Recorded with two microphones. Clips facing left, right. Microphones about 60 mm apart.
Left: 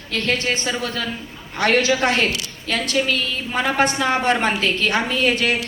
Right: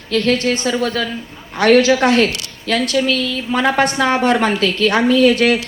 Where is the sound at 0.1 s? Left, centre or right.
Right.